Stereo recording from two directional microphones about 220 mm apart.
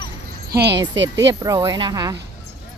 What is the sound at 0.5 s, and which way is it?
Speech, 50° right (ahead or behind).